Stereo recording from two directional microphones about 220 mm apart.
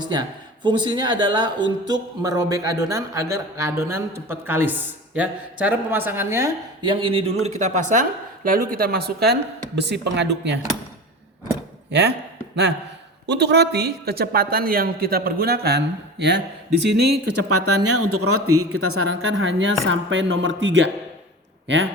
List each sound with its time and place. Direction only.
0.0 s a man's voice: 20° right (ahead or behind)
7.0 s a man's voice: 25° right (ahead or behind); by 10.6 s 50° right (ahead or behind)
11.9 s speech: 50° right (ahead or behind)
13.2 s a man's voice: 50° right (ahead or behind)
17.2 s speech: 90° right; by 20.9 s 55° right (ahead or behind)